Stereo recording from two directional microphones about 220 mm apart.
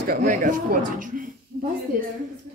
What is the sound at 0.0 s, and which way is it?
Speech, 40° right (ahead or behind).